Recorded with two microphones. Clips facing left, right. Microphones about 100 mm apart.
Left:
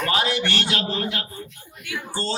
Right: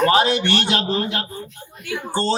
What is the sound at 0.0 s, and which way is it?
A man's voice, 30° right (ahead or behind).